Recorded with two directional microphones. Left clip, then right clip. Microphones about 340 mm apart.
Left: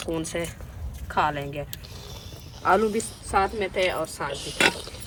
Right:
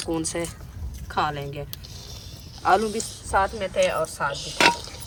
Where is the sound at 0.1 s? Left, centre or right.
Centre.